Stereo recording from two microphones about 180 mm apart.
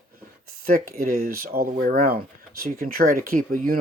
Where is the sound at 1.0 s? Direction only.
55° right (ahead or behind).